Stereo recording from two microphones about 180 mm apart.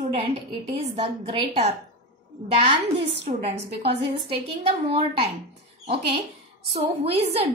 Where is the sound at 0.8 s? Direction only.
35° right (ahead or behind).